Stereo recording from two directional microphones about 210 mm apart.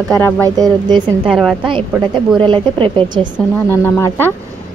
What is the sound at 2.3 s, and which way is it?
Speech, 25° right (ahead or behind).